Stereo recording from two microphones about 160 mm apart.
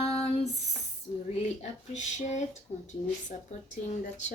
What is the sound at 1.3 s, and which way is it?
Speech, 45° left (ahead or behind).